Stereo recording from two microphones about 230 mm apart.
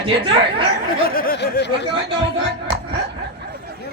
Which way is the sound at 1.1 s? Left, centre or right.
Left.